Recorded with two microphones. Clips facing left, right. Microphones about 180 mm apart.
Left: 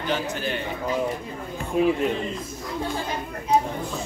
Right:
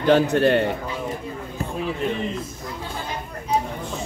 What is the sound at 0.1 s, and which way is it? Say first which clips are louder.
Speech: right 12 dB; 65° right (ahead or behind).